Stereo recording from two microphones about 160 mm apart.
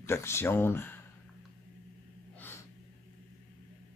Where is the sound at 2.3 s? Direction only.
15° left (ahead or behind).